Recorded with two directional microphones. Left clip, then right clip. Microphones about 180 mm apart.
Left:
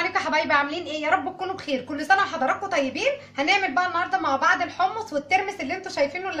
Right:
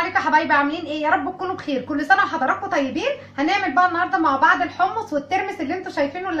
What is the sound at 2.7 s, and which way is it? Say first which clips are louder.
A woman's voice: right 2 dB; 45° left (ahead or behind).